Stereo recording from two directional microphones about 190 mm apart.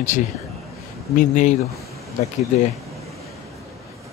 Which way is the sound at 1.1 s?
40° left (ahead or behind).